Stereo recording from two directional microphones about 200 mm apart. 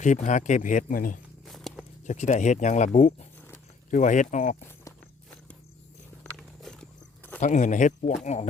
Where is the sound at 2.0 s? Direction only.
35° left (ahead or behind).